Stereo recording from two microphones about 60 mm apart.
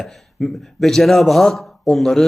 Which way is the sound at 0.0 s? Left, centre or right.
Centre.